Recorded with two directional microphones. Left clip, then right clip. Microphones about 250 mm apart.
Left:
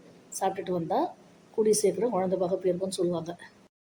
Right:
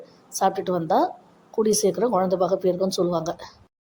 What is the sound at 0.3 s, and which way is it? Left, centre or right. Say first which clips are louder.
A woman's voice: right 7 dB; right.